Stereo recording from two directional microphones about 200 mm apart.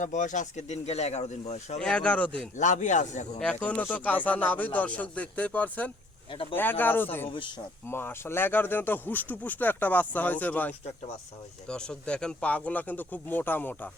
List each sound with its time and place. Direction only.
0.0 s speech: 40° left (ahead or behind)
1.8 s speech: 5° left (ahead or behind)
2.6 s speech: 40° left (ahead or behind)
3.4 s speech: 5° left (ahead or behind)
7.3 s speech: 25° left (ahead or behind)
7.9 s speech: 10° left (ahead or behind)